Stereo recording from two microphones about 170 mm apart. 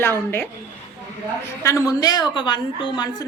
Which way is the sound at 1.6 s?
20° left (ahead or behind).